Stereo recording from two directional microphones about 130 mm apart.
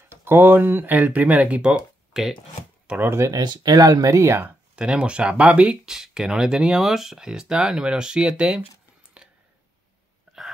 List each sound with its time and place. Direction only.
0.1 s speech: 15° right (ahead or behind)
2.9 s speech: 20° right (ahead or behind)
4.7 s speech: 10° right (ahead or behind)
9.2 s a sound: 10° right (ahead or behind)